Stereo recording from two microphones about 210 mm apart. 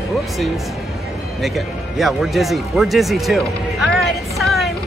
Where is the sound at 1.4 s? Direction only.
Centre (ahead or behind).